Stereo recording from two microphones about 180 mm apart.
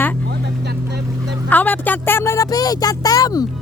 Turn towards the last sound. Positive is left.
turn(degrees=20)  # may be behind; listen again after turning